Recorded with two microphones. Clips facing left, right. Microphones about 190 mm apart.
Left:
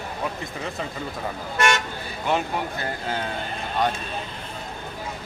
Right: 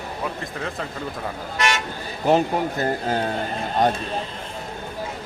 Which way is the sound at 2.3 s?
40° right (ahead or behind).